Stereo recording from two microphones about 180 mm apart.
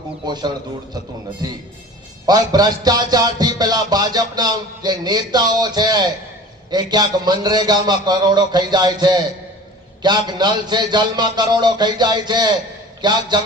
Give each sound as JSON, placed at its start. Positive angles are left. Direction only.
{"t": 0.3, "sound": "music", "side_deg": -25}